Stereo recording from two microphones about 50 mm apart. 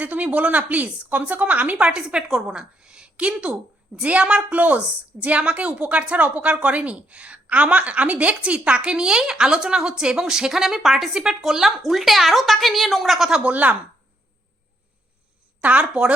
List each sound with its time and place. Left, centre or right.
0.0 s a woman's voice: right
1.8 s a woman's voice: right
13.4 s a woman's voice: right
15.6 s speech: right